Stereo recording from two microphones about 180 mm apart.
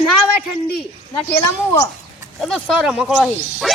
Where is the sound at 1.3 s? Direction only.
25° left (ahead or behind).